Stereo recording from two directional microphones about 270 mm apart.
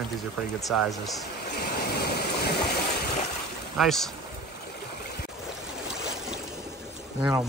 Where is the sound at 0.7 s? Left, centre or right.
Centre.